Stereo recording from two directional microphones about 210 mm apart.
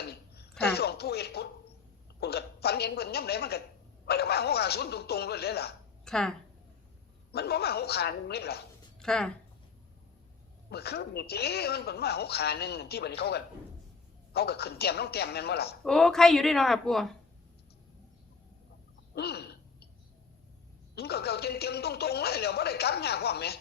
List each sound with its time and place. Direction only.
0.6 s speech: 50° left (ahead or behind)
6.1 s speech: centre (ahead or behind)
7.3 s speech: 50° left (ahead or behind)
9.0 s speech: 5° left (ahead or behind)
10.7 s speech: 50° left (ahead or behind)
15.8 s speech: 5° left (ahead or behind)
19.1 s a sound: 50° left (ahead or behind)
20.9 s speech: 50° left (ahead or behind)